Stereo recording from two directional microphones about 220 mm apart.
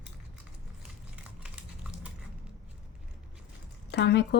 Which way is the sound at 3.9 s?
50° left (ahead or behind).